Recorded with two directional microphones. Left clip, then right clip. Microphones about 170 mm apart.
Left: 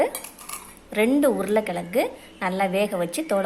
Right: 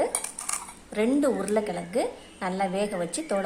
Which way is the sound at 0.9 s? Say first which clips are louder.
Left 4 dB; 5° left (ahead or behind).